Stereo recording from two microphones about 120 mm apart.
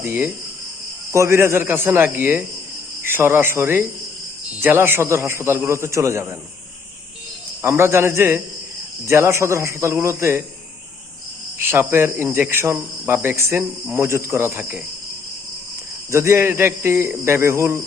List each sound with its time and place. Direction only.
0.0 s a man's voice: 20° right (ahead or behind)
7.6 s speech: 20° right (ahead or behind)
11.6 s speech: 20° right (ahead or behind)
16.1 s speech: 20° right (ahead or behind)